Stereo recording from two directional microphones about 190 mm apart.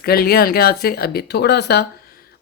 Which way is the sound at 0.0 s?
55° left (ahead or behind).